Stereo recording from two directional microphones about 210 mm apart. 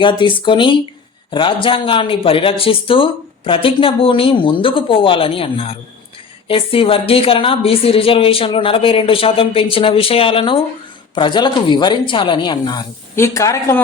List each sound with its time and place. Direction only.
0.0 s a woman's voice: 25° left (ahead or behind)